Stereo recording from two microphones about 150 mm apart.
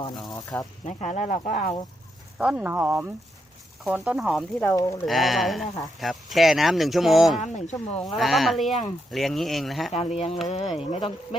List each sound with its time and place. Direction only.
0.3 s speech: 25° left (ahead or behind)
0.9 s speech: 50° left (ahead or behind)
2.4 s speech: 5° right (ahead or behind)
4.6 s speech: 20° left (ahead or behind)
5.0 s speech: centre (ahead or behind)
7.3 s speech: 50° left (ahead or behind)
8.0 s speech: centre (ahead or behind)
9.9 s speech: 45° left (ahead or behind)